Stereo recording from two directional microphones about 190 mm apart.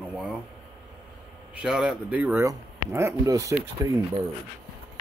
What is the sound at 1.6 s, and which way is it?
Speech, 5° right (ahead or behind).